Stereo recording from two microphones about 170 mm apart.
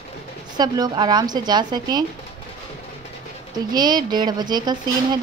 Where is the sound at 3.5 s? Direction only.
25° right (ahead or behind).